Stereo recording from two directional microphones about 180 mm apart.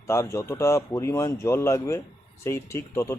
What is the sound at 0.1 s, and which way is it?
A man's voice, 15° left (ahead or behind).